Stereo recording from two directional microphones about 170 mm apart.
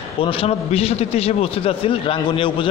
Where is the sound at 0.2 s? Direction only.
30° left (ahead or behind).